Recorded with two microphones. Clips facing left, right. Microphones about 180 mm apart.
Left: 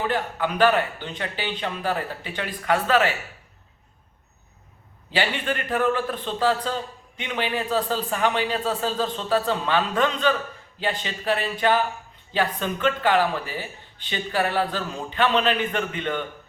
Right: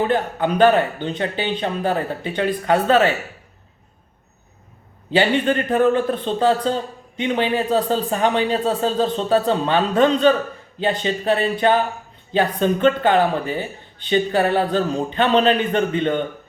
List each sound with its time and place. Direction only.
0.0 s speech: 35° right (ahead or behind)
5.3 s speech: 35° right (ahead or behind)